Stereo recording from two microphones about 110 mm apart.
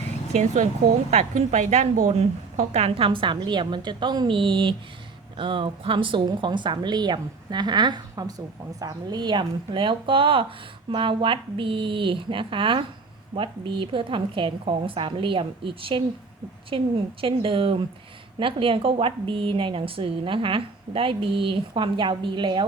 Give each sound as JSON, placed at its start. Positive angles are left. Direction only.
{"t": 1.1, "sound": "a woman's voice", "side_deg": -90}